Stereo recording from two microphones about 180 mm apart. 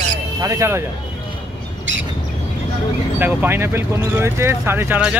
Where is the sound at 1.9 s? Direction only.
90° right.